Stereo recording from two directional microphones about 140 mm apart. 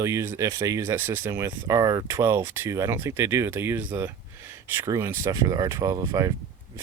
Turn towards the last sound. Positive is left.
turn(degrees=-25)  # may be behind; listen again after turning